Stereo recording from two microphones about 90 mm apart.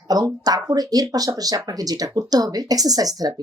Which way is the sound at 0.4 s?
45° right (ahead or behind).